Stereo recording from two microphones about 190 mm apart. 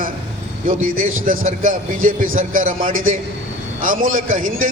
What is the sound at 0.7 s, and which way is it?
A man's voice, 45° right (ahead or behind).